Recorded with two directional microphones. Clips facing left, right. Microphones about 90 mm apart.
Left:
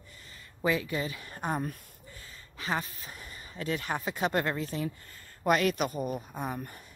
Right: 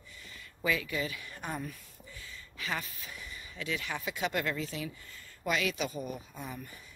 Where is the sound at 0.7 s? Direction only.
35° left (ahead or behind).